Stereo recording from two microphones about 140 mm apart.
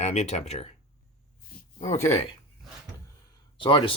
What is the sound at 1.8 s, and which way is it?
Speech, 50° left (ahead or behind).